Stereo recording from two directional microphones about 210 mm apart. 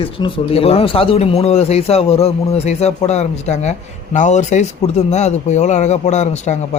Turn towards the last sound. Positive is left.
turn(degrees=35)  # may be behind; listen again after turning